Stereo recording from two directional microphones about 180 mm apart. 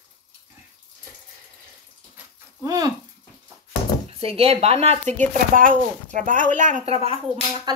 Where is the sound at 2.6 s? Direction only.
20° right (ahead or behind).